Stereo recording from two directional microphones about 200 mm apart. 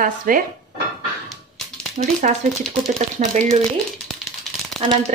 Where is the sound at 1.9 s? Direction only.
40° right (ahead or behind).